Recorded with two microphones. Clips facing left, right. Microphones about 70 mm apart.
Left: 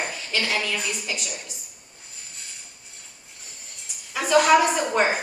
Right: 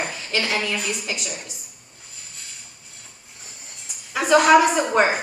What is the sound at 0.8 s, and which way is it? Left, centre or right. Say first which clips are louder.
Speech: right 2 dB; centre.